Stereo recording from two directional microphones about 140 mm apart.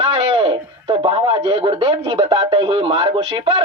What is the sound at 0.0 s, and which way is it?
A man's voice, 45° right (ahead or behind).